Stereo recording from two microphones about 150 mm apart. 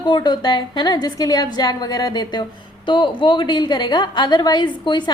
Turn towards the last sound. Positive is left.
turn(degrees=30)  # may be behind; listen again after turning